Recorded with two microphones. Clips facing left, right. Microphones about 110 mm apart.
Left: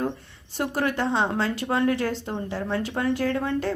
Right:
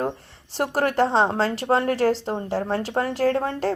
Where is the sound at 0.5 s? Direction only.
40° right (ahead or behind).